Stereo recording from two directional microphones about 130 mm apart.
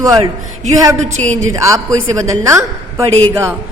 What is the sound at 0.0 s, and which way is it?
Speech, 25° right (ahead or behind).